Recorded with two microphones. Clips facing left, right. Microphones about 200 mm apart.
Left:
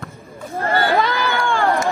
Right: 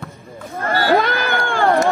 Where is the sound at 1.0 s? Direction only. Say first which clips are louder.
Even; 55° right (ahead or behind).